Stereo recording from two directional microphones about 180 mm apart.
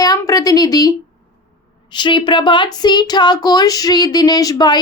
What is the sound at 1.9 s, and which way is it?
A woman's voice, 25° left (ahead or behind).